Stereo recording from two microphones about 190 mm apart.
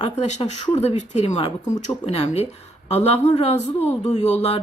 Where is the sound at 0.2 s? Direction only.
35° left (ahead or behind).